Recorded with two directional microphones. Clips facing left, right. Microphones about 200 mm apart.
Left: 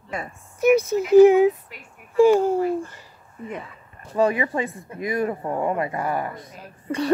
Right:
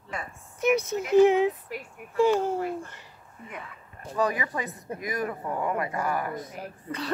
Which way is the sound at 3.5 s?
25° left (ahead or behind).